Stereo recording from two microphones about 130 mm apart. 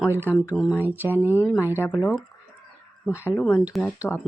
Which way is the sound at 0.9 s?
15° right (ahead or behind).